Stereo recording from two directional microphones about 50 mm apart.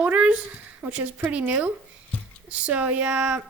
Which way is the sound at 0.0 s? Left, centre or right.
Right.